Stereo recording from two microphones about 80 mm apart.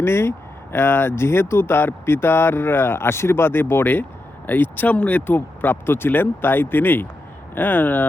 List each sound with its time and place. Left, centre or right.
0.0 s speech: left